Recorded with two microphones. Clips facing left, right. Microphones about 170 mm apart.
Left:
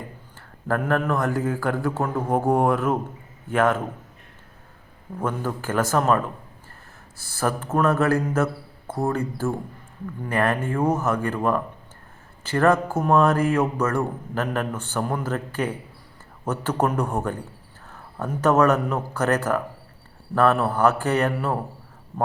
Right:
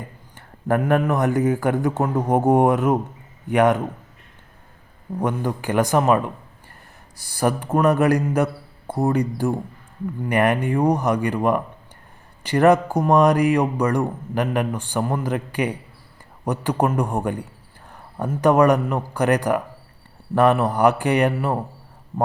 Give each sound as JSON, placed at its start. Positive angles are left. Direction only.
{"t": 0.3, "sound": "a man's voice", "side_deg": -20}
{"t": 5.2, "sound": "speech", "side_deg": -15}